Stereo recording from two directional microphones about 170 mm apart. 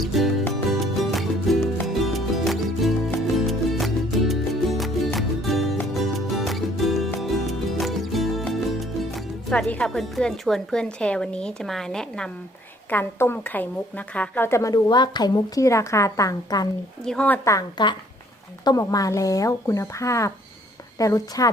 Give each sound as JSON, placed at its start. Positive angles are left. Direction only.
{"t": 0.0, "sound": "music", "side_deg": 0}
{"t": 12.9, "sound": "a woman's voice", "side_deg": 10}
{"t": 17.1, "sound": "a woman's voice", "side_deg": 10}